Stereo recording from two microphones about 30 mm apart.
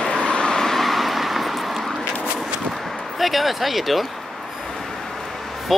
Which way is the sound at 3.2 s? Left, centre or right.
Centre.